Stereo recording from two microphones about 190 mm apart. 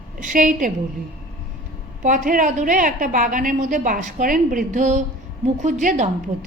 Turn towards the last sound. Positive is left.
turn(degrees=-40)  # may be behind; listen again after turning